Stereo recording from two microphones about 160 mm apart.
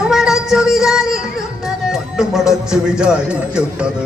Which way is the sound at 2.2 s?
5° right (ahead or behind).